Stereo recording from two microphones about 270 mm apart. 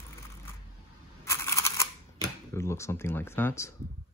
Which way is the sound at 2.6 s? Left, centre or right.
Centre.